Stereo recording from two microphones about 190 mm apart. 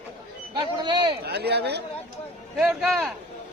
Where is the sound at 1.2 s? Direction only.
60° right (ahead or behind).